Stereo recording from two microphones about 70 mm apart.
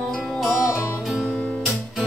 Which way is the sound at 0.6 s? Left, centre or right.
Left.